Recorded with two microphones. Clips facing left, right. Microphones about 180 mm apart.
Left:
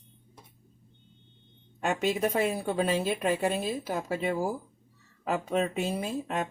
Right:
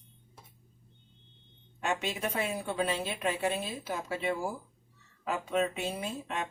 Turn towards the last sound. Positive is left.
turn(degrees=45)  # may be behind; listen again after turning